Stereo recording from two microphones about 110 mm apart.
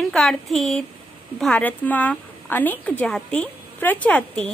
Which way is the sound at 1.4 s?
10° left (ahead or behind).